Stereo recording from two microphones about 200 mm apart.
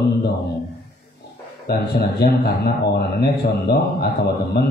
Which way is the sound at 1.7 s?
50° left (ahead or behind).